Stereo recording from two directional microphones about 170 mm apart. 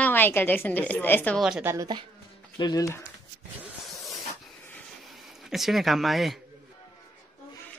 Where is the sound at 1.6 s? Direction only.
20° right (ahead or behind).